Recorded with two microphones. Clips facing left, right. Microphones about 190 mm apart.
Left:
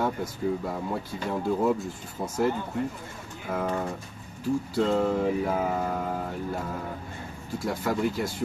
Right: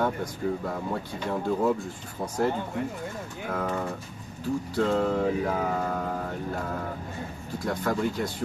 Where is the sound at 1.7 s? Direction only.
25° left (ahead or behind).